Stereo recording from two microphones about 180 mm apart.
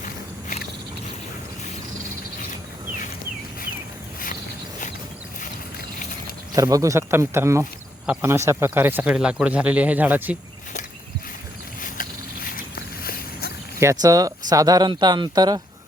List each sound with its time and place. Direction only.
6.5 s speech: 20° right (ahead or behind)
11.8 s a sound: 50° left (ahead or behind)
13.7 s speech: 20° right (ahead or behind)